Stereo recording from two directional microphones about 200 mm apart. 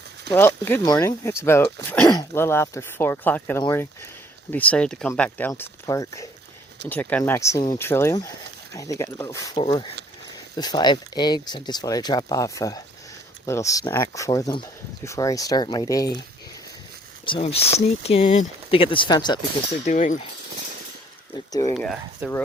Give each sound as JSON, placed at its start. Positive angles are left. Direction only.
{"t": 0.3, "sound": "speech", "side_deg": 10}
{"t": 17.2, "sound": "speech", "side_deg": 25}
{"t": 19.8, "sound": "speech", "side_deg": 40}
{"t": 21.3, "sound": "speech", "side_deg": 20}
{"t": 21.8, "sound": "speech", "side_deg": 0}